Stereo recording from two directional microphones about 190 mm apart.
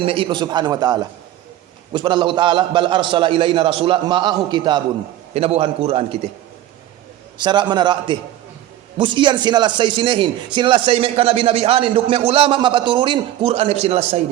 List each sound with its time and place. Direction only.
0.0 s a man's voice: 30° right (ahead or behind)
7.3 s speech: 25° right (ahead or behind)